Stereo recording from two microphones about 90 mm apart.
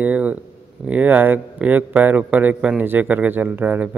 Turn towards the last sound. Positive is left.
turn(degrees=-20)  # may be behind; listen again after turning